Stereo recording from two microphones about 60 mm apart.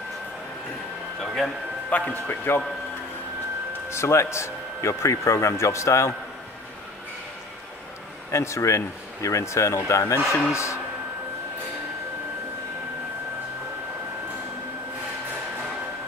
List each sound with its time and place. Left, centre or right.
1.2 s speech: centre
1.9 s a man's voice: left
2.2 s a man's voice: left
3.9 s speech: left
8.3 s speech: left